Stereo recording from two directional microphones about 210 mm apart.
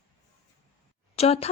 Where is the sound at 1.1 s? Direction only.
30° left (ahead or behind).